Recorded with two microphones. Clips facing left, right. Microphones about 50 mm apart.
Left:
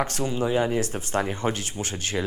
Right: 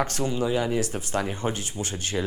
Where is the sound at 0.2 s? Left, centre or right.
Left.